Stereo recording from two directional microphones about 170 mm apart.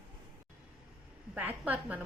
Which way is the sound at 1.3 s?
10° right (ahead or behind).